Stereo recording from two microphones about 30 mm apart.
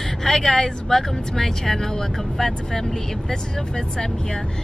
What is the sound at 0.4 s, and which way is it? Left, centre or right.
Speech, left.